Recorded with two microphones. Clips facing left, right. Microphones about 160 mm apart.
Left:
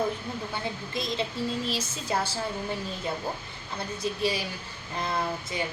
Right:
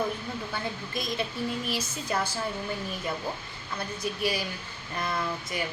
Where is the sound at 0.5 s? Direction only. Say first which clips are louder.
Left 1 dB; 25° left (ahead or behind).